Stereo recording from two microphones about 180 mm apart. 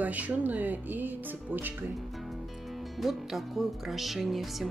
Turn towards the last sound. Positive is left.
turn(degrees=0)  # may be behind; listen again after turning